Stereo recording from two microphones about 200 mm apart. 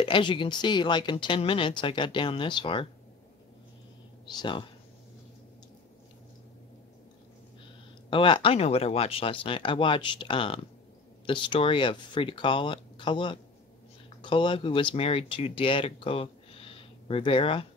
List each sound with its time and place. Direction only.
0.0 s speech: 25° left (ahead or behind)
4.3 s speech: 25° left (ahead or behind)
8.1 s speech: 25° left (ahead or behind)